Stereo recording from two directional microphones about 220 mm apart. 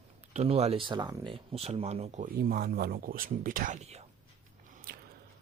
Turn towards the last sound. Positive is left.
turn(degrees=-40)  # may be behind; listen again after turning